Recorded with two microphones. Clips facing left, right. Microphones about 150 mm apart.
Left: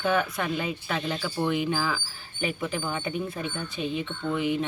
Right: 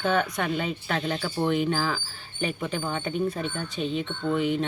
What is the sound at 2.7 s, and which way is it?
Speech, 5° left (ahead or behind).